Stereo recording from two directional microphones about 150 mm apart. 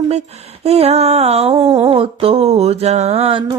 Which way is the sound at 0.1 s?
45° right (ahead or behind).